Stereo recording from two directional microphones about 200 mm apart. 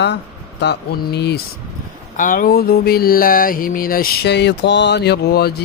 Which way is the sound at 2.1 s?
40° left (ahead or behind).